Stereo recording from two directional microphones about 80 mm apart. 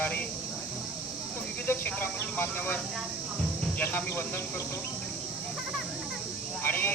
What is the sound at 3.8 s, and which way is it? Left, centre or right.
Speech, left.